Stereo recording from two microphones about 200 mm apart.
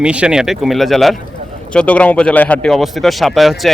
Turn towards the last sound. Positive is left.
turn(degrees=0)  # may be behind; listen again after turning